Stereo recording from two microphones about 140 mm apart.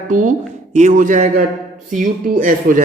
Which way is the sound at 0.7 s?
55° right (ahead or behind).